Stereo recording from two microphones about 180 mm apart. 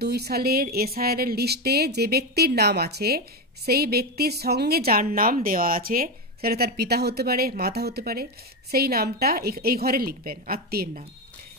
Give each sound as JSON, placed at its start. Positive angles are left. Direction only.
{"t": 0.0, "sound": "a woman's voice", "side_deg": -65}